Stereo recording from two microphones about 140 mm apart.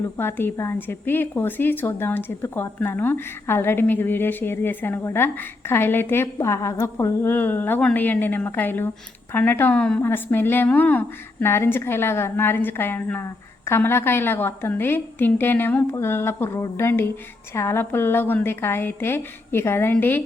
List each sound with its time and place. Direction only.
0.2 s a woman's voice: 15° left (ahead or behind)